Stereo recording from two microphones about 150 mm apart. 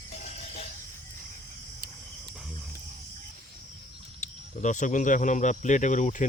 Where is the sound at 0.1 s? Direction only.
45° left (ahead or behind).